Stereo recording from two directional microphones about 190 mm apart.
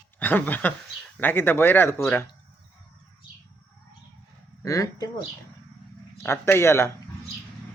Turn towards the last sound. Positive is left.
turn(degrees=15)  # may be behind; listen again after turning